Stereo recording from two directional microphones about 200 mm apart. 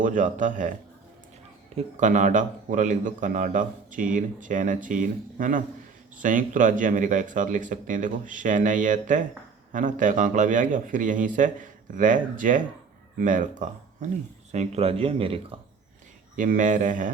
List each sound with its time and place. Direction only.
0.0 s a man's voice: 40° right (ahead or behind)
1.7 s a man's voice: 40° right (ahead or behind)
16.3 s a man's voice: 40° right (ahead or behind)